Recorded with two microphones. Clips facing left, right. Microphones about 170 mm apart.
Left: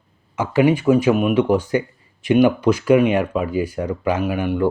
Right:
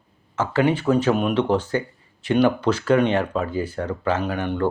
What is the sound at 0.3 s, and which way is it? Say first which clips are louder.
Speech: left 4 dB; 15° left (ahead or behind).